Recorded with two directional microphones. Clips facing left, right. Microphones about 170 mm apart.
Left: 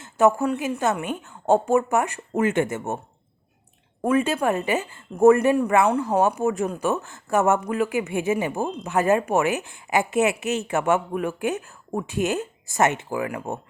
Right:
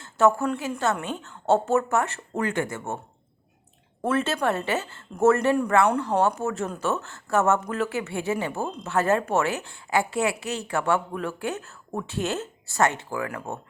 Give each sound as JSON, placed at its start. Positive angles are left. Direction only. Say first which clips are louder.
{"t": 0.0, "sound": "a woman's voice", "louder": "left 2 dB", "side_deg": 15}
{"t": 4.0, "sound": "a woman's voice", "louder": "left 3 dB", "side_deg": 10}